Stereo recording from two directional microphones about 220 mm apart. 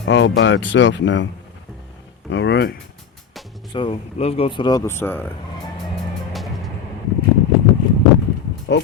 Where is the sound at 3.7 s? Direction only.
25° left (ahead or behind).